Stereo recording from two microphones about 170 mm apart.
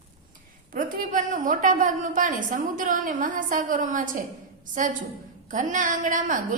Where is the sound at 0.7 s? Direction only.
50° right (ahead or behind).